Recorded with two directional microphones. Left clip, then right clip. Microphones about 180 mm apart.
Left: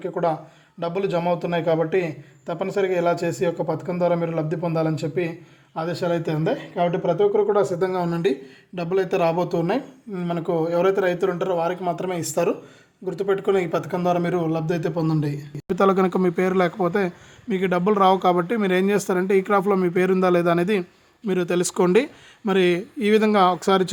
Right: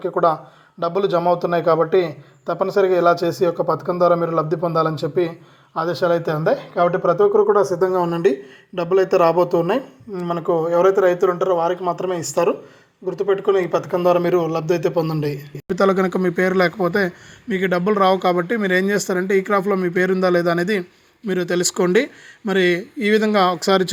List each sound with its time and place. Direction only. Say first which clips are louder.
0.0 s a man's voice: right 6 dB; 5° left (ahead or behind)
7.6 s speech: right 4 dB; 25° left (ahead or behind)
8.0 s speech: right 5 dB; 5° right (ahead or behind)
10.2 s a man's voice: right 4 dB; 15° left (ahead or behind); by 23.9 s 5° right (ahead or behind)